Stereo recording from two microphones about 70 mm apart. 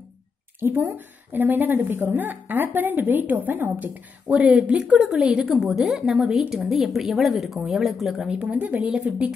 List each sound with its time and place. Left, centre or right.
0.6 s a woman's voice: right; by 8.3 s centre
8.3 s a woman's voice: centre